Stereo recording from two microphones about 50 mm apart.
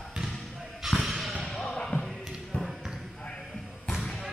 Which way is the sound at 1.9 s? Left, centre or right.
Left.